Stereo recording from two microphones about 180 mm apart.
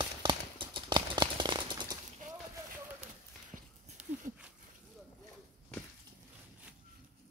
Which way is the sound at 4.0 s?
5° right (ahead or behind).